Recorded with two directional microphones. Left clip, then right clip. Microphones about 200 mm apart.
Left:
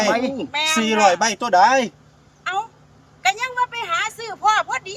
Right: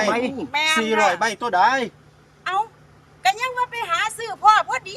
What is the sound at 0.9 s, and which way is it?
Speech, 50° left (ahead or behind).